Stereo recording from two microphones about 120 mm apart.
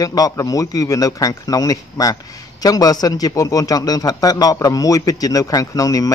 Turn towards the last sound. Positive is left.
turn(degrees=30)  # may be behind; listen again after turning